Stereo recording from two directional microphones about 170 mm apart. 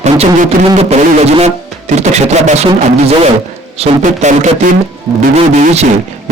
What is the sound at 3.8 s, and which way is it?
A man's voice, 45° right (ahead or behind).